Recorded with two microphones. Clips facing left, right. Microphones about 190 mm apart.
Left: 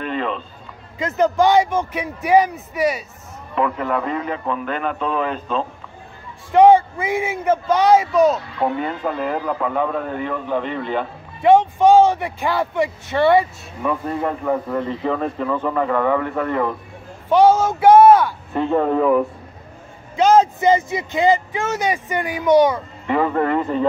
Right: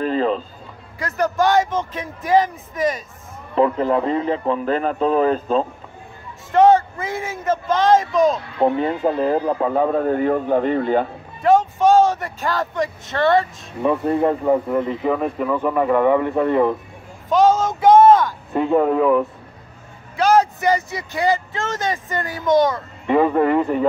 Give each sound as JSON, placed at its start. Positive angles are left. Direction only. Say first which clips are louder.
{"t": 0.0, "sound": "a sound", "louder": "right 5 dB", "side_deg": -35}
{"t": 0.9, "sound": "speech", "louder": "left 3 dB", "side_deg": 20}
{"t": 3.5, "sound": "a man's voice", "louder": "right 4 dB", "side_deg": -30}
{"t": 6.5, "sound": "speech", "louder": "left 2 dB", "side_deg": 15}
{"t": 8.5, "sound": "a man's voice", "louder": "right 4 dB", "side_deg": -30}
{"t": 11.4, "sound": "speech", "louder": "left 2 dB", "side_deg": 15}
{"t": 13.8, "sound": "speech", "louder": "right 5 dB", "side_deg": -25}
{"t": 14.7, "sound": "speech", "louder": "right 2 dB", "side_deg": -5}
{"t": 17.3, "sound": "a sound", "louder": "left 2 dB", "side_deg": 10}
{"t": 18.5, "sound": "speech", "louder": "right 2 dB", "side_deg": -10}
{"t": 20.2, "sound": "speech", "louder": "left 2 dB", "side_deg": 20}
{"t": 23.0, "sound": "speech", "louder": "right 3 dB", "side_deg": -20}